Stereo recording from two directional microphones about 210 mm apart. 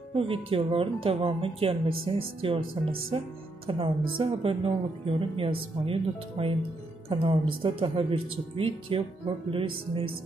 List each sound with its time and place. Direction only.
0.1 s speech: 25° right (ahead or behind)